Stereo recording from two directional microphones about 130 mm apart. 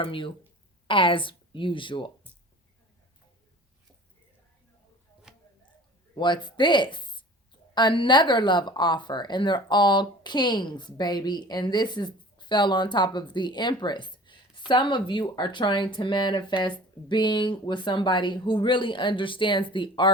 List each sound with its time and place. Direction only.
0.0 s speech: 40° left (ahead or behind)
5.3 s a sound: 5° right (ahead or behind)
6.1 s speech: 35° left (ahead or behind)